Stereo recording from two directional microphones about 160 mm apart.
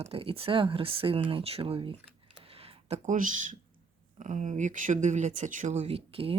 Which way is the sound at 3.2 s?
55° right (ahead or behind).